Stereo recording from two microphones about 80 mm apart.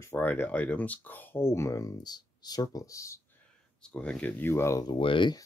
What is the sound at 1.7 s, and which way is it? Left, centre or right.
Speech, left.